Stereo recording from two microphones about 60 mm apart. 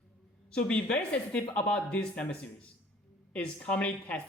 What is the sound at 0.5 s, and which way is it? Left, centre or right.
Speech, centre.